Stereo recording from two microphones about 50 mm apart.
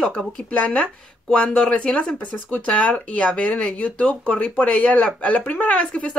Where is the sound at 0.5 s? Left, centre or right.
Left.